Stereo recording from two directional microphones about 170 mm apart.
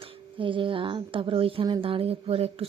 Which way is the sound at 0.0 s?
30° right (ahead or behind).